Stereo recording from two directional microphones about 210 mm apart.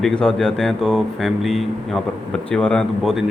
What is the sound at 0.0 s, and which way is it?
Speech, 5° left (ahead or behind).